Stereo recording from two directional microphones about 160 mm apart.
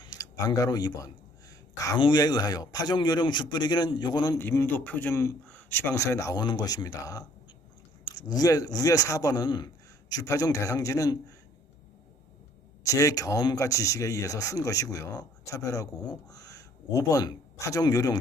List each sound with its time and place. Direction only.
0.0 s speech: 20° left (ahead or behind)
4.4 s a man's voice: 15° left (ahead or behind)
12.8 s speech: 20° left (ahead or behind)